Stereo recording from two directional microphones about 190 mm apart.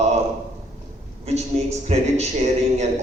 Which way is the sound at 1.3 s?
35° right (ahead or behind).